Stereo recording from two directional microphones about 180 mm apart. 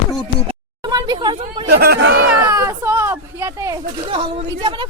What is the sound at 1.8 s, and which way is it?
Speech, 75° right (ahead or behind).